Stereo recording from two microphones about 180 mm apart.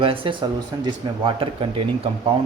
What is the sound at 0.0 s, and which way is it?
Speech, 30° right (ahead or behind).